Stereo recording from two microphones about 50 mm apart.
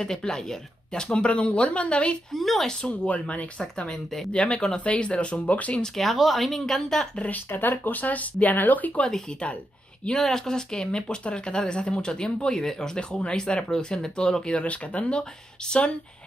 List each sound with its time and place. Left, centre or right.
0.0 s speech: centre
1.2 s speech: left
2.3 s speech: centre
2.9 s speech: left
5.8 s speech: centre
7.2 s speech: left
7.4 s speech: left
10.0 s speech: centre
14.5 s speech: left